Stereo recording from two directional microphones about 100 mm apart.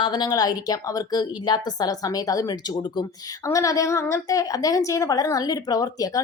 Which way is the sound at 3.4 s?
30° left (ahead or behind).